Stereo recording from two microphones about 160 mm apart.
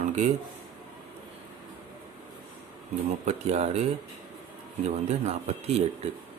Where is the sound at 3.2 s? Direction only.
45° right (ahead or behind).